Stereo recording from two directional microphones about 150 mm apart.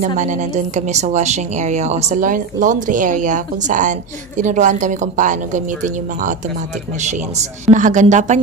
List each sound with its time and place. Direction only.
0.0 s a woman's voice: 55° right (ahead or behind)
7.6 s a woman's voice: 60° right (ahead or behind)